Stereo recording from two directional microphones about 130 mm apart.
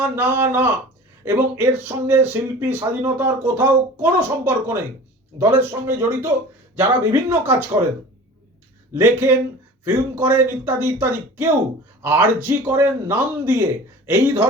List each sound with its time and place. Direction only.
0.0 s speech: 15° right (ahead or behind)
8.9 s speech: 15° right (ahead or behind)
12.0 s speech: 15° right (ahead or behind)